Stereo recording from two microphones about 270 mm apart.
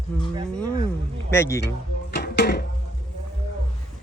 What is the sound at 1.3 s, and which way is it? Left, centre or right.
Speech, centre.